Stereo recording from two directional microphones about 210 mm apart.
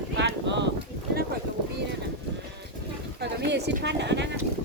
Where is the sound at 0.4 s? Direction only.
55° right (ahead or behind).